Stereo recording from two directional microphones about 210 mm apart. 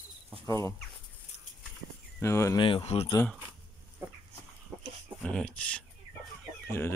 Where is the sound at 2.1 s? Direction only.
15° left (ahead or behind); by 3.2 s 30° left (ahead or behind).